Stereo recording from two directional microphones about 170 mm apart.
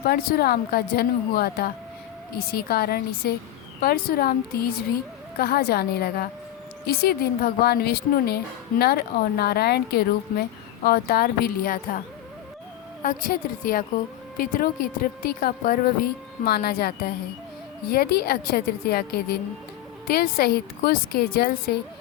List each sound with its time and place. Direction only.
0.0 s a woman's voice: 65° left (ahead or behind)
13.0 s a woman's voice: 50° left (ahead or behind)